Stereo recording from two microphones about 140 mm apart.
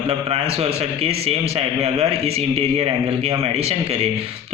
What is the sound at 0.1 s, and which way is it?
A man's voice, 45° right (ahead or behind).